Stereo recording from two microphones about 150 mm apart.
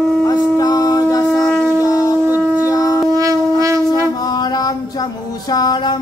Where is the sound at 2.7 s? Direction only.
20° left (ahead or behind).